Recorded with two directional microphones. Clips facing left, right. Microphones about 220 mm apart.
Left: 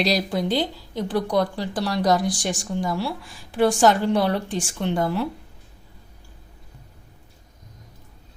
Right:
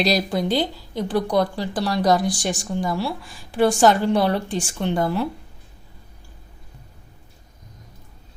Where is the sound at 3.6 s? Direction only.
35° right (ahead or behind).